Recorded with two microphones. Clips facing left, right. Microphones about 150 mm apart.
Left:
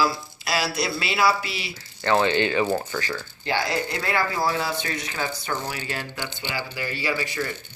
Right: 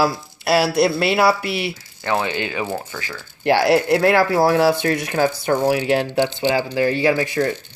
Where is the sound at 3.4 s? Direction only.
75° right (ahead or behind).